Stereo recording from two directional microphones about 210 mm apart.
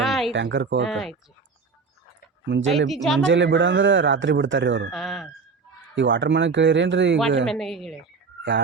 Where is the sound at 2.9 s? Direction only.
Centre (ahead or behind).